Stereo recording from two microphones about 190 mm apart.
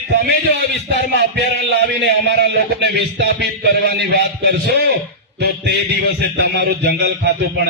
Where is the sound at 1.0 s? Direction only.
55° right (ahead or behind).